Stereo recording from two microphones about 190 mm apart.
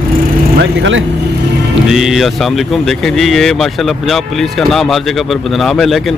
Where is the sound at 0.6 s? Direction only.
80° right.